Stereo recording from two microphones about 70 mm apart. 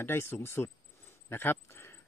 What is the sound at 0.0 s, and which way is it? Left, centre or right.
Speech, left.